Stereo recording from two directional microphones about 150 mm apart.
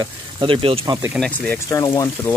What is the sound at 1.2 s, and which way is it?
Speech, 10° left (ahead or behind).